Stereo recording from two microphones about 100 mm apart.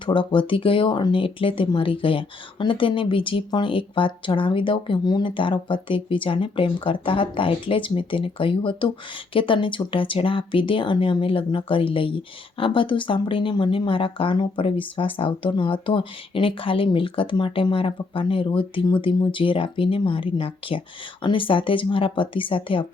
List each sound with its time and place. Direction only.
0.0 s speech: 55° left (ahead or behind)